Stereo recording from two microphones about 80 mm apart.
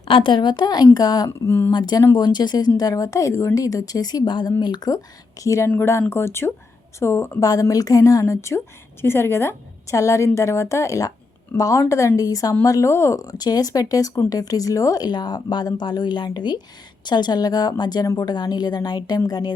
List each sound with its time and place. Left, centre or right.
0.1 s a woman's voice: left
1.5 s speech: left
1.7 s speech: left
5.4 s a woman's voice: left
5.6 s a woman's voice: left
7.4 s a woman's voice: left
18.0 s speech: left
18.3 s speech: left